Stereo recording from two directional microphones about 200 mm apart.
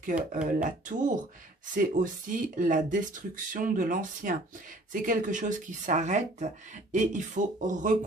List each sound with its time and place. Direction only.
0.5 s speech: 40° right (ahead or behind)